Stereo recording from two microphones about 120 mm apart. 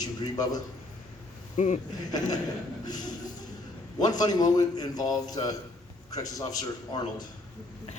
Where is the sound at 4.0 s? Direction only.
35° left (ahead or behind).